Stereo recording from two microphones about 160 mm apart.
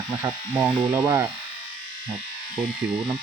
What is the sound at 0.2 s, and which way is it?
Speech, 10° right (ahead or behind).